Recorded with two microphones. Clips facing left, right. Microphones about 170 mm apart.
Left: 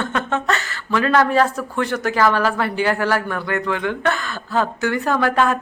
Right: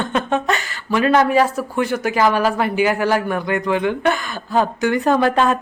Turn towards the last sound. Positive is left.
turn(degrees=-20)  # may be behind; listen again after turning